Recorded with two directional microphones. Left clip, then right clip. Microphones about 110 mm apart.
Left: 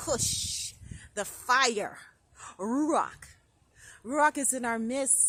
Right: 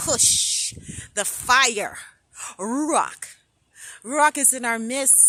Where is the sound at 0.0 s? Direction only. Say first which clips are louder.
Right 9 dB; 40° right (ahead or behind).